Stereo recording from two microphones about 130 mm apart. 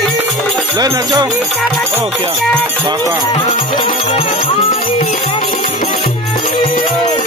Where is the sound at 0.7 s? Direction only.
30° right (ahead or behind).